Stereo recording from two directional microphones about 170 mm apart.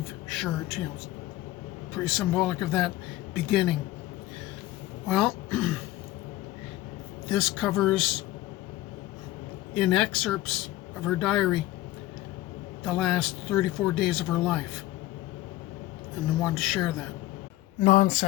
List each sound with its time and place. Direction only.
0.3 s speech: 5° left (ahead or behind)
2.0 s speech: centre (ahead or behind)
5.0 s speech: centre (ahead or behind)
7.3 s speech: centre (ahead or behind)
9.7 s speech: centre (ahead or behind)
12.8 s speech: centre (ahead or behind)
16.4 s speech: centre (ahead or behind)
17.8 s speech: 45° left (ahead or behind)